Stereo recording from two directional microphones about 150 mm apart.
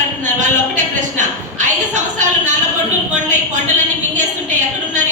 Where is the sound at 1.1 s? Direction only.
55° right (ahead or behind).